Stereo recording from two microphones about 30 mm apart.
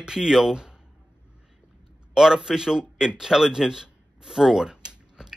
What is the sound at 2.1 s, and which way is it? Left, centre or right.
Speech, right.